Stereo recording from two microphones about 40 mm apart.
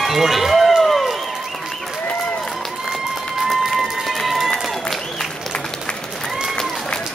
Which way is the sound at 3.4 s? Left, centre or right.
Centre.